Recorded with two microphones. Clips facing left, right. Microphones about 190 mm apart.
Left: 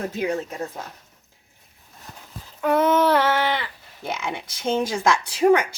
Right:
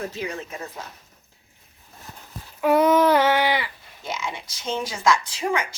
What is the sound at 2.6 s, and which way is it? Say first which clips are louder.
Child singing: right 1 dB; 10° right (ahead or behind).